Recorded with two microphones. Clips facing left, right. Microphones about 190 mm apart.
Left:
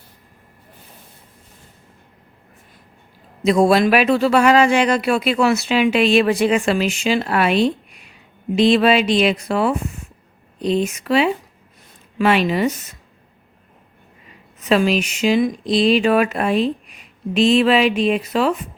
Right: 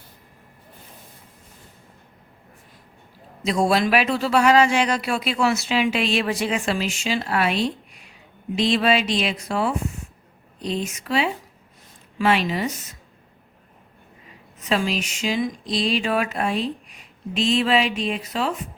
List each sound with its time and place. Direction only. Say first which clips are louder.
3.4 s speech: left 6 dB; 55° left (ahead or behind)
14.6 s speech: left 7 dB; 65° left (ahead or behind)